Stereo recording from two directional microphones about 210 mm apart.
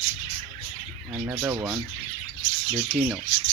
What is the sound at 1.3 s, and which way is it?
Speech, 15° right (ahead or behind).